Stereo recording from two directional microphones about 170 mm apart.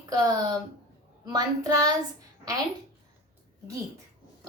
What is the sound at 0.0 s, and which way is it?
A woman's voice, 20° right (ahead or behind).